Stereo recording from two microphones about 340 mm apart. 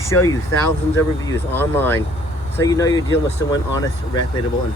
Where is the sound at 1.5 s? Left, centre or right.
Centre.